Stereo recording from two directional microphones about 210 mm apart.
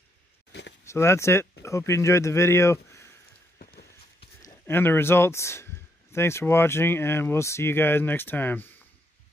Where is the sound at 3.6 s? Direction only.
45° left (ahead or behind).